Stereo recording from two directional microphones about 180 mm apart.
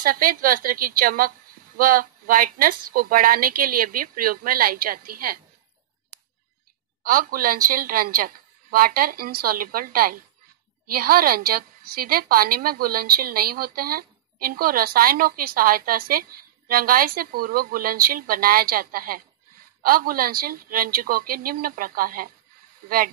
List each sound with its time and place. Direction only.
0.0 s a woman's voice: 50° right (ahead or behind)
7.0 s a woman's voice: 50° right (ahead or behind)